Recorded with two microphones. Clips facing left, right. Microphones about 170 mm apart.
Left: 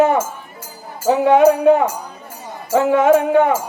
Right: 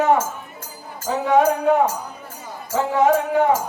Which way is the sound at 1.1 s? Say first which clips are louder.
Left 6 dB; 65° left (ahead or behind).